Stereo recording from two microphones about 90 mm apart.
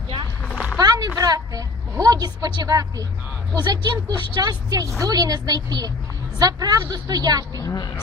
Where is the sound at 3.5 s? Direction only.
50° right (ahead or behind).